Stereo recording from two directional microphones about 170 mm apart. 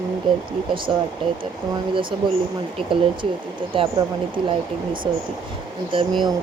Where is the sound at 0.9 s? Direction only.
35° right (ahead or behind).